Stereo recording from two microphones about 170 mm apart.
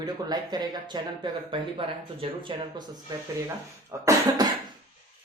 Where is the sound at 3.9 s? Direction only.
15° right (ahead or behind).